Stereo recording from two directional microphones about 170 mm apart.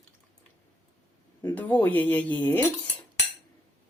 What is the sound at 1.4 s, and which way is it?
Speech, 10° left (ahead or behind).